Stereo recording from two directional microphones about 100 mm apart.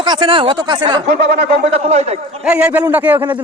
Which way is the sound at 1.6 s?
90° right.